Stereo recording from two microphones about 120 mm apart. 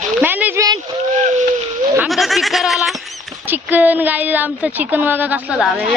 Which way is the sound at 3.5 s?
15° right (ahead or behind).